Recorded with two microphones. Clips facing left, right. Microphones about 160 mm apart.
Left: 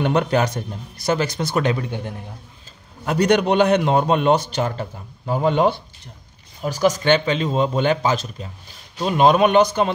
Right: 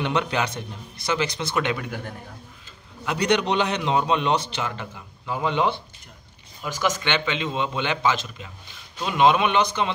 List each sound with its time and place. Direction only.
0.0 s a man's voice: 45° left (ahead or behind)
3.1 s a man's voice: 50° left (ahead or behind)